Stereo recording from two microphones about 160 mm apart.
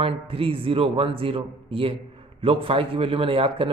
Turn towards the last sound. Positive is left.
turn(degrees=-35)  # may be behind; listen again after turning